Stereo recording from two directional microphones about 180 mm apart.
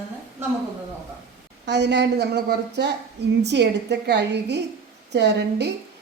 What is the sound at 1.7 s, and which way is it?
A woman's voice, 75° right (ahead or behind).